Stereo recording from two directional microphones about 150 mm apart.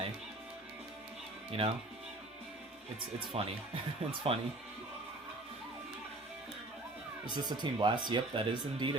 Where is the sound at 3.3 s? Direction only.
40° right (ahead or behind).